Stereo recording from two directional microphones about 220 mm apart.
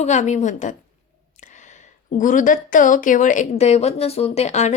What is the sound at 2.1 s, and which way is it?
Speech, 35° left (ahead or behind).